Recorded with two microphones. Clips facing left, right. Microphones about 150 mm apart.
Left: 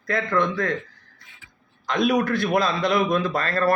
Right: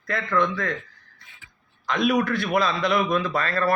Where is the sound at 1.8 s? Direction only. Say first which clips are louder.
Left 1 dB; 45° left (ahead or behind).